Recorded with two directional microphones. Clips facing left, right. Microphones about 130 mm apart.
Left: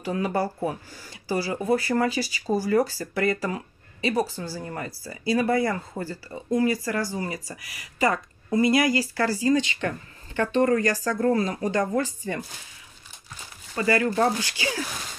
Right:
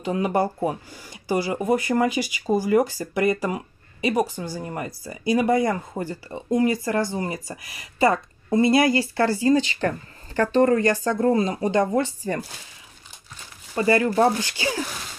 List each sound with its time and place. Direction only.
0.0 s speech: 20° right (ahead or behind)
13.7 s speech: 30° right (ahead or behind)